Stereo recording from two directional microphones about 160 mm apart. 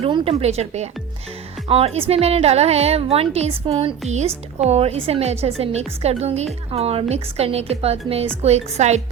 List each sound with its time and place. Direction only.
0.0 s a woman's voice: 35° right (ahead or behind)